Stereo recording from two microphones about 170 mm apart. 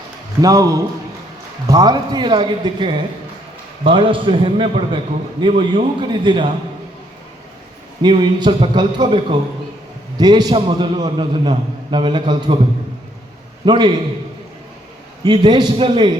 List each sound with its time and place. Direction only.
0.4 s a man's voice: 20° right (ahead or behind)
8.0 s a man's voice: 25° right (ahead or behind)
13.7 s a man's voice: 25° right (ahead or behind)
15.2 s a man's voice: 25° right (ahead or behind)